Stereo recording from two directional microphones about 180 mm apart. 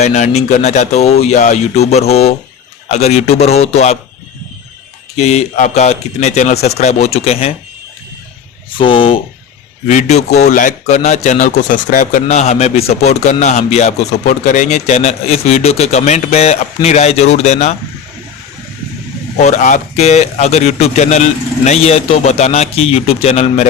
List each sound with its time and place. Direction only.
0.0 s speech: 40° left (ahead or behind)
5.1 s speech: 40° left (ahead or behind)
8.8 s speech: 30° left (ahead or behind)
9.8 s speech: 40° left (ahead or behind)
19.4 s speech: 40° left (ahead or behind)